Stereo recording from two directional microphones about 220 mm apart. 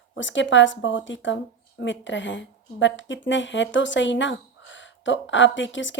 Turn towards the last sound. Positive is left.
turn(degrees=55)  # may be behind; listen again after turning